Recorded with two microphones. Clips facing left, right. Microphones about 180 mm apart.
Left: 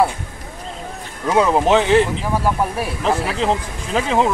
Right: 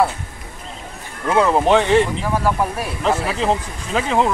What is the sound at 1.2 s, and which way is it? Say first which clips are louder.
Speech: even; 10° left (ahead or behind).